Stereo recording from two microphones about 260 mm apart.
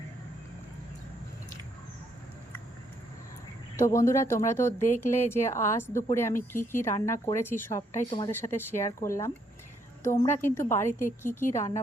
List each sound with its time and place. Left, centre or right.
3.8 s speech: centre
11.4 s a woman's voice: left